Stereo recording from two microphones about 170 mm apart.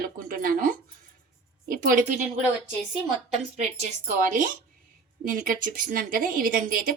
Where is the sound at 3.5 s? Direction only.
40° right (ahead or behind); by 6.9 s 55° right (ahead or behind).